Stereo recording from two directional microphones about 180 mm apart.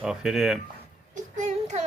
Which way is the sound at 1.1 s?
40° right (ahead or behind).